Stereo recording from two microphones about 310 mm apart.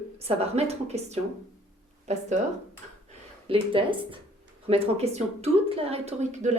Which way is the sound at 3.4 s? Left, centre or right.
Centre.